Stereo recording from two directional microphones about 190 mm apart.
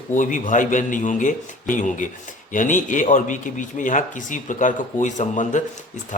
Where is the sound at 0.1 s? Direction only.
40° left (ahead or behind).